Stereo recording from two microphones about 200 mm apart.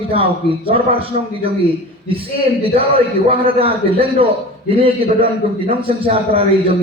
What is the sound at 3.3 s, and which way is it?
A man's voice, 25° right (ahead or behind).